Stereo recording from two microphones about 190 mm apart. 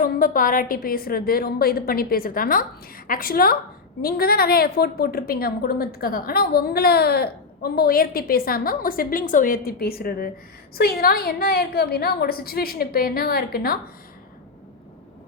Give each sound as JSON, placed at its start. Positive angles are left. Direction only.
{"t": 0.0, "sound": "a woman's voice", "side_deg": 45}